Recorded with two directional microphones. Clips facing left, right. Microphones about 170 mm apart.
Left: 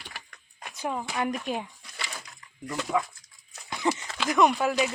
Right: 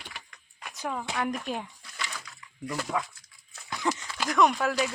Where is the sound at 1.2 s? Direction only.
5° left (ahead or behind).